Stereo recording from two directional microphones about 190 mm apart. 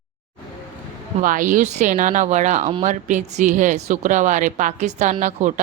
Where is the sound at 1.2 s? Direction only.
45° right (ahead or behind).